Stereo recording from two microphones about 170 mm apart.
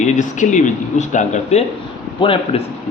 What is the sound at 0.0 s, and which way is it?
A man's voice, 45° left (ahead or behind).